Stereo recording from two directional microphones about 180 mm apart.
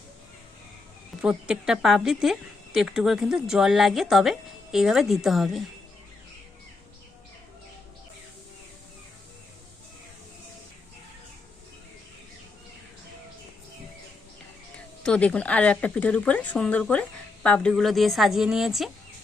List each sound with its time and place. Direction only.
1.2 s a woman's voice: 5° right (ahead or behind)
15.0 s speech: 5° left (ahead or behind)